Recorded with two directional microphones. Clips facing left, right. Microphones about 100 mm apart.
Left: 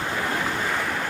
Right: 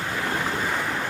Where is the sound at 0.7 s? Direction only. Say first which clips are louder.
Even; 5° right (ahead or behind).